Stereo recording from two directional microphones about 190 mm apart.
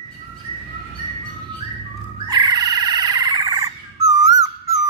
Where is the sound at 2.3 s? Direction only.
20° right (ahead or behind).